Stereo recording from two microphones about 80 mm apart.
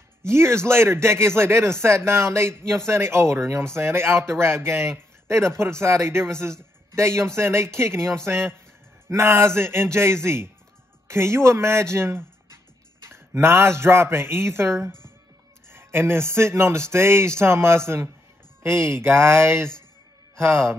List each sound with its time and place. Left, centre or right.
0.2 s speech: right